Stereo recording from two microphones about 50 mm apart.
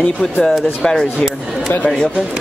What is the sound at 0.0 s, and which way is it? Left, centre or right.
Speech, centre.